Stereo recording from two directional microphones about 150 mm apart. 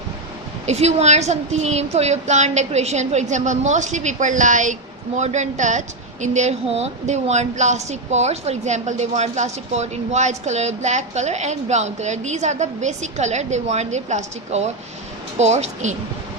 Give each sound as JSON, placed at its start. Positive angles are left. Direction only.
{"t": 0.6, "sound": "a woman's voice", "side_deg": -45}